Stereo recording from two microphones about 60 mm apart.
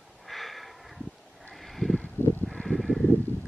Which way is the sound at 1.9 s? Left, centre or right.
Centre.